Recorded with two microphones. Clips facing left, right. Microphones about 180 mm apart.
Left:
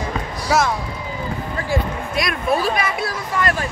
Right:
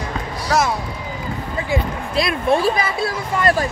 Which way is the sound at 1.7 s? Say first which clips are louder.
Even; 25° right (ahead or behind).